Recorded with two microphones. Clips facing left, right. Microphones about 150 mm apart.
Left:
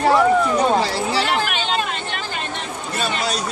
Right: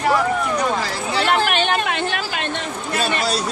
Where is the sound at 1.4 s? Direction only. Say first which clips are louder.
Right 3 dB; 65° right (ahead or behind).